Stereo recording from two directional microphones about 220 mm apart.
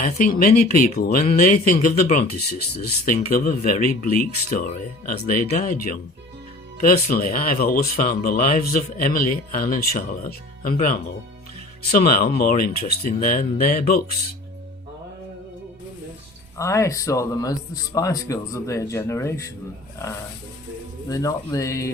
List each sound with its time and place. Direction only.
0.0 s speech: 35° left (ahead or behind)
16.6 s speech: 15° left (ahead or behind)
21.1 s speech: 15° left (ahead or behind)